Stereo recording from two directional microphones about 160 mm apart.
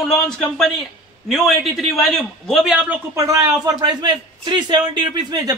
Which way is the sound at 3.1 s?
20° right (ahead or behind).